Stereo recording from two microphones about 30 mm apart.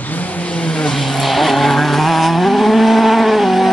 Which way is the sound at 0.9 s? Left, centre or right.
Centre.